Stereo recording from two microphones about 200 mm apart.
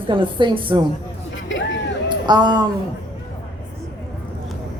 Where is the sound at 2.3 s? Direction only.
20° right (ahead or behind).